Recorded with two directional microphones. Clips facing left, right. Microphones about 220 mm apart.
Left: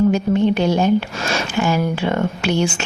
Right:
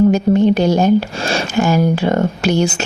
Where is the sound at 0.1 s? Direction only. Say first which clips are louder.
Right 4 dB; 40° right (ahead or behind).